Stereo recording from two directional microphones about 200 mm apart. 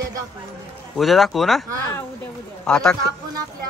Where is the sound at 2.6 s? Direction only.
5° left (ahead or behind).